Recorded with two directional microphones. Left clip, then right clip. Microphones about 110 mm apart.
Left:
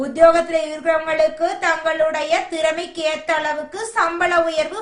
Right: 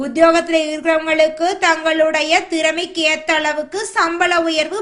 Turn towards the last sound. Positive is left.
turn(degrees=-25)  # may be behind; listen again after turning